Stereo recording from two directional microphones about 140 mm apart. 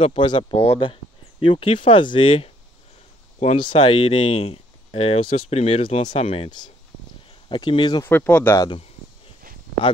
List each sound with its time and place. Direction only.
0.0 s speech: 40° left (ahead or behind)
3.5 s speech: 35° left (ahead or behind)
8.0 s speech: 15° left (ahead or behind)
8.5 s speech: 35° left (ahead or behind)